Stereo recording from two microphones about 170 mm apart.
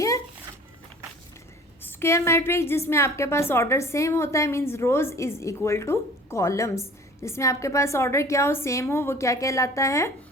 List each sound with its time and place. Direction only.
1.8 s a woman's voice: 15° left (ahead or behind)